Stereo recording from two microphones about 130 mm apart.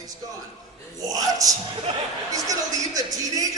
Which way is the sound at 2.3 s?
25° right (ahead or behind).